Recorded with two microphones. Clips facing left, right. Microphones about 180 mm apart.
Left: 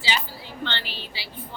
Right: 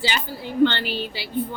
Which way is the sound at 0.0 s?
55° right (ahead or behind).